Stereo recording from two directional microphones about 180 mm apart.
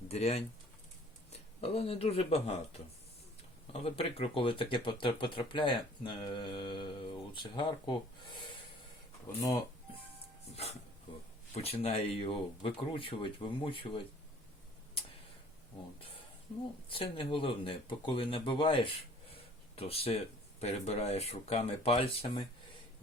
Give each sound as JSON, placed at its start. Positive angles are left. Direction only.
{"t": 0.1, "sound": "speech", "side_deg": 35}
{"t": 1.6, "sound": "speech", "side_deg": 35}
{"t": 10.5, "sound": "speech", "side_deg": 35}
{"t": 16.9, "sound": "speech", "side_deg": 30}